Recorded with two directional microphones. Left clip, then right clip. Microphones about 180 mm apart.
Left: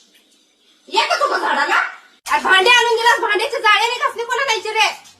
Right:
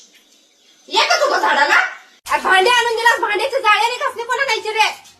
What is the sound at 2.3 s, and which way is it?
A child's voice, 10° left (ahead or behind).